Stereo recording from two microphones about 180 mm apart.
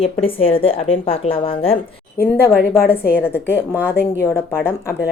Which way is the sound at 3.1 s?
10° left (ahead or behind).